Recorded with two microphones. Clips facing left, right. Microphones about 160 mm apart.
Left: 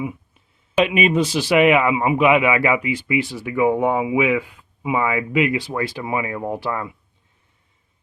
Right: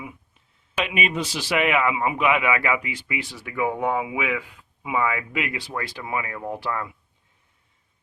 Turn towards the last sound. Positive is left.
turn(degrees=10)  # may be behind; listen again after turning